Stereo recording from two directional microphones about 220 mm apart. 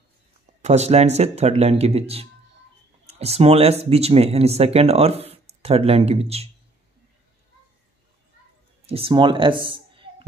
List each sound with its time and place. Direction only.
0.6 s speech: 30° right (ahead or behind)
8.8 s speech: 25° right (ahead or behind)